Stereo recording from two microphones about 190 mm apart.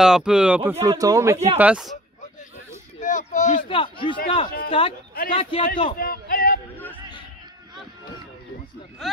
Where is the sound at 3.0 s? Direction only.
40° left (ahead or behind).